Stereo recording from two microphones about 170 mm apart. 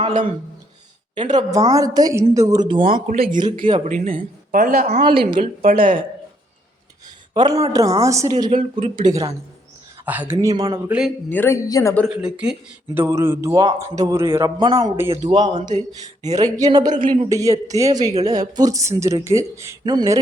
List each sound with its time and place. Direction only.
1.4 s speech: 20° right (ahead or behind)
3.1 s speech: 50° right (ahead or behind)
4.9 s a woman's voice: 35° right (ahead or behind)
7.3 s speech: 25° right (ahead or behind)
10.1 s speech: 10° right (ahead or behind)
10.8 s a man's voice: 5° right (ahead or behind)
11.3 s speech: 15° left (ahead or behind)
12.0 s speech: 5° right (ahead or behind); by 15.5 s 25° right (ahead or behind)
15.5 s speech: 45° right (ahead or behind)
16.2 s speech: 20° right (ahead or behind)
16.9 s speech: 50° right (ahead or behind)
17.2 s speech: 20° right (ahead or behind)